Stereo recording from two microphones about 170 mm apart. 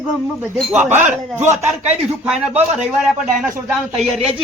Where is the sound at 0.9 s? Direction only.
10° right (ahead or behind).